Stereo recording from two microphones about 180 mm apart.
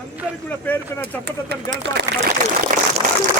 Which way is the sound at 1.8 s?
75° right (ahead or behind).